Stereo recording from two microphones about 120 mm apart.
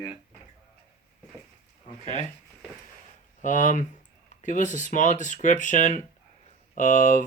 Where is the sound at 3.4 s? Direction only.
90° left.